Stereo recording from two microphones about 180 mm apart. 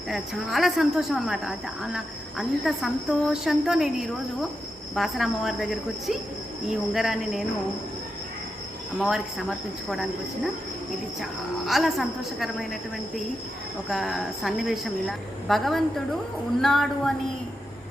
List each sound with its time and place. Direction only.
0.1 s a woman's voice: centre (ahead or behind)
9.0 s a woman's voice: centre (ahead or behind)
13.9 s a woman's voice: centre (ahead or behind)